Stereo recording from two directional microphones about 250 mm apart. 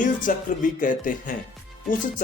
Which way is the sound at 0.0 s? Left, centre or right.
Left.